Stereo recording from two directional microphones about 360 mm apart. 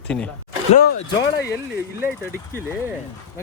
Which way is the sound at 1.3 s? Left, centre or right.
Left.